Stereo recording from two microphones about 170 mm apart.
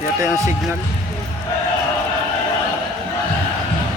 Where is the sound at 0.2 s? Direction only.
20° right (ahead or behind).